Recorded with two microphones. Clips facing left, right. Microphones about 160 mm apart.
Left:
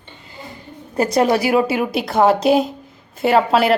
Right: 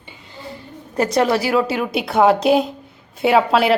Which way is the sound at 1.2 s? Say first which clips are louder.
Left 2 dB; 15° left (ahead or behind).